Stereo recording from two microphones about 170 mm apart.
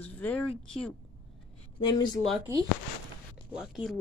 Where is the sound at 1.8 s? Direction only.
25° left (ahead or behind).